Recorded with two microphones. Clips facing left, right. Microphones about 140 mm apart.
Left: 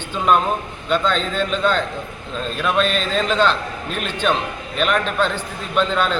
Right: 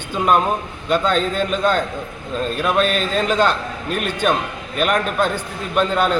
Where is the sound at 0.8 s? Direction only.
10° right (ahead or behind).